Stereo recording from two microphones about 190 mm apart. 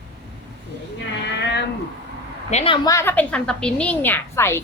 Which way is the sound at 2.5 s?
35° left (ahead or behind).